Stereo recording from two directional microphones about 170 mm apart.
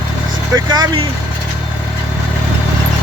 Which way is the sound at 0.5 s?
25° right (ahead or behind).